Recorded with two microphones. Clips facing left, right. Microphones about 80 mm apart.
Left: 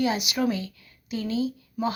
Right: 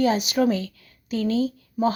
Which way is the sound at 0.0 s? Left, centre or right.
Right.